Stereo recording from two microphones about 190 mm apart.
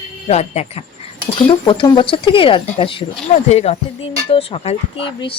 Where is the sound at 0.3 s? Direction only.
35° left (ahead or behind).